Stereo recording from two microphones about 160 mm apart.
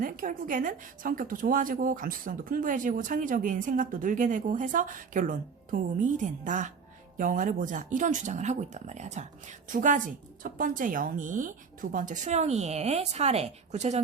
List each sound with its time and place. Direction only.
0.0 s a woman's voice: 55° right (ahead or behind)